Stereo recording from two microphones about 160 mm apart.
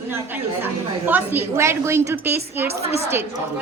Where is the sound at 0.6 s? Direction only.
10° right (ahead or behind).